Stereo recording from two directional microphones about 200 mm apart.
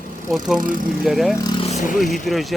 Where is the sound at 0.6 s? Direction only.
45° right (ahead or behind).